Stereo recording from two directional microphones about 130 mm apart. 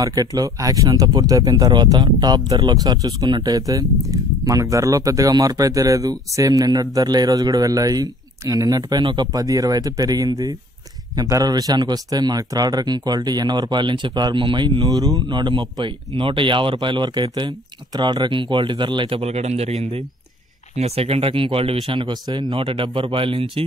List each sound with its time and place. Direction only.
0.0 s speech: 30° right (ahead or behind); by 23.6 s 45° right (ahead or behind)